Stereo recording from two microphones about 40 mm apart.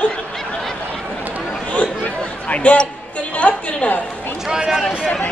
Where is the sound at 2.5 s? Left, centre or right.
Left.